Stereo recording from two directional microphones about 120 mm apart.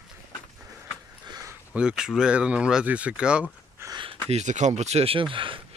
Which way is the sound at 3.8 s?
20° right (ahead or behind).